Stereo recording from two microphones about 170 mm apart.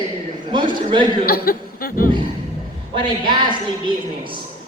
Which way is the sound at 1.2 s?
60° left (ahead or behind).